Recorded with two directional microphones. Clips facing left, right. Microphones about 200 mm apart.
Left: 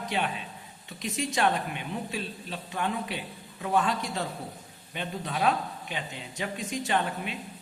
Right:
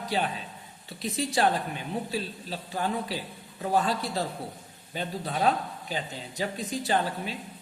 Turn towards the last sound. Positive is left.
turn(degrees=-35)  # may be behind; listen again after turning